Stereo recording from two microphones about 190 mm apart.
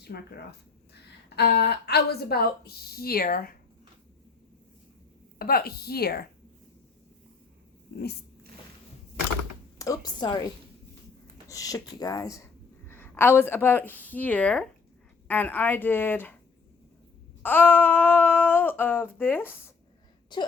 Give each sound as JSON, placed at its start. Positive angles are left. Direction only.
{"t": 0.0, "sound": "speech", "side_deg": 60}
{"t": 1.4, "sound": "a woman's voice", "side_deg": 60}
{"t": 5.4, "sound": "a woman's voice", "side_deg": 50}
{"t": 9.7, "sound": "a woman's voice", "side_deg": 15}
{"t": 11.4, "sound": "a sound", "side_deg": 20}
{"t": 17.4, "sound": "a sound", "side_deg": 10}